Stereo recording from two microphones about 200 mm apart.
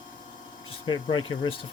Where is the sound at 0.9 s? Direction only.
25° left (ahead or behind).